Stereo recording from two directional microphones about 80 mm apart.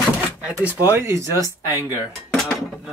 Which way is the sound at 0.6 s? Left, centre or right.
Right.